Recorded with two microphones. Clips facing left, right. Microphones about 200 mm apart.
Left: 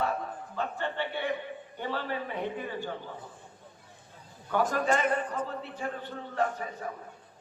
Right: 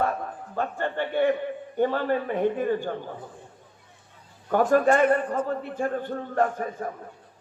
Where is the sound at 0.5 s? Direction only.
50° right (ahead or behind).